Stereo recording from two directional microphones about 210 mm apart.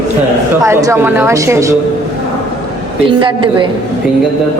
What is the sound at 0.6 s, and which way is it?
A woman's voice, 15° right (ahead or behind).